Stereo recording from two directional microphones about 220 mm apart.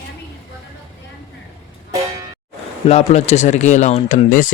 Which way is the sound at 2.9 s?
30° left (ahead or behind).